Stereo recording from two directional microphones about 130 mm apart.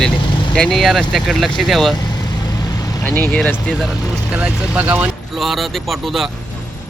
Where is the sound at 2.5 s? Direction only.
30° left (ahead or behind).